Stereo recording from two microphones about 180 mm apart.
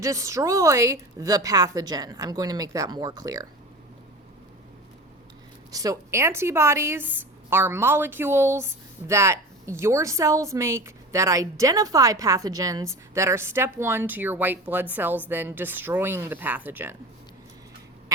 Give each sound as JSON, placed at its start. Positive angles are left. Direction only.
{"t": 0.0, "sound": "a woman's voice", "side_deg": -15}
{"t": 5.7, "sound": "a woman's voice", "side_deg": -20}